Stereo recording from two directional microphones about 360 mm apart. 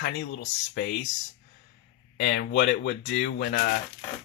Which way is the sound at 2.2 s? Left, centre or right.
Left.